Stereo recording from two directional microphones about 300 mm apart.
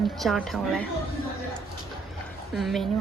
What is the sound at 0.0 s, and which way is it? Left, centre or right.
Speech, centre.